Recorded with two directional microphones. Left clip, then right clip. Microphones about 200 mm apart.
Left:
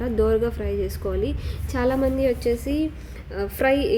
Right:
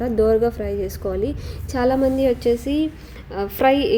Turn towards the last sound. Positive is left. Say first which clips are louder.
# right 4 dB
turn(degrees=-20)  # may be behind; listen again after turning